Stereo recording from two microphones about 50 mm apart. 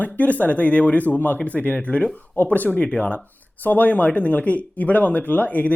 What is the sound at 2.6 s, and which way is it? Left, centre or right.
Speech, left.